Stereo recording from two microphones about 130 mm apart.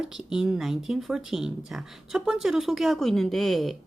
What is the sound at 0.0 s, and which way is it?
Speech, 5° right (ahead or behind).